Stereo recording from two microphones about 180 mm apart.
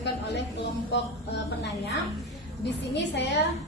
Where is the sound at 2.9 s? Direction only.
70° left (ahead or behind).